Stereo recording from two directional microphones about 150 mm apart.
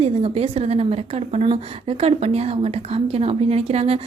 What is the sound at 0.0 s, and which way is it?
A woman's voice, 40° right (ahead or behind).